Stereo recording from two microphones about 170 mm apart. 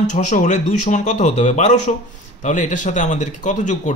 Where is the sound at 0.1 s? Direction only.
45° left (ahead or behind).